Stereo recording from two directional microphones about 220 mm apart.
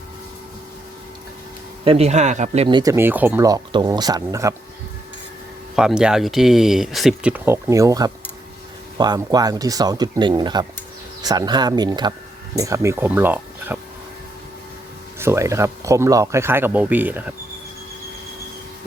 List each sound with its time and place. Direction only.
1.8 s speech: 25° right (ahead or behind)
5.7 s speech: 5° right (ahead or behind)
15.2 s speech: 15° right (ahead or behind)